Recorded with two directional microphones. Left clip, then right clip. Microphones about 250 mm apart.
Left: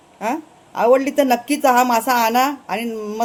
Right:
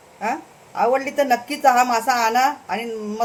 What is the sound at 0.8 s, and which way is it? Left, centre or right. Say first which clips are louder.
A woman's voice: left 4 dB; left.